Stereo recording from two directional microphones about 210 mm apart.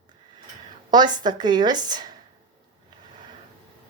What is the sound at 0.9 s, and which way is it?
Speech, 20° right (ahead or behind).